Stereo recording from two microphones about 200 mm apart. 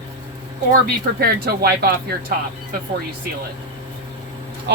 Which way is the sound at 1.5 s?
55° right (ahead or behind).